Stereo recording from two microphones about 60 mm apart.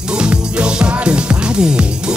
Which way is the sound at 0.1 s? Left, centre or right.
Centre.